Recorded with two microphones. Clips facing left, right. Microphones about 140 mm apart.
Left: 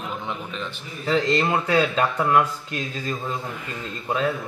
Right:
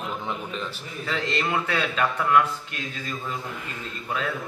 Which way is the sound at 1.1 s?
35° left (ahead or behind).